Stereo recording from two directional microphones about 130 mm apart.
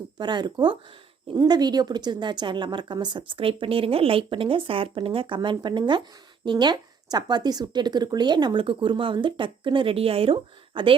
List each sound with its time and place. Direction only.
0.2 s speech: 35° right (ahead or behind)